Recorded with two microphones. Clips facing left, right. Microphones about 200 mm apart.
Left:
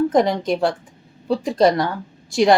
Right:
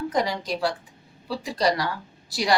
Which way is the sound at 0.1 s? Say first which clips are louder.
Left 8 dB; 50° left (ahead or behind).